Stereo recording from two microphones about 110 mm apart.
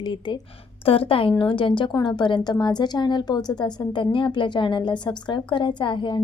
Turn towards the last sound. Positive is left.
turn(degrees=45)  # may be behind; listen again after turning